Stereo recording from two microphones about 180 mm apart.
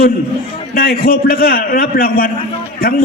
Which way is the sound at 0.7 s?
55° left (ahead or behind).